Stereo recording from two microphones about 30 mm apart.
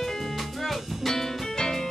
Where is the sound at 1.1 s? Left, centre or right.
Centre.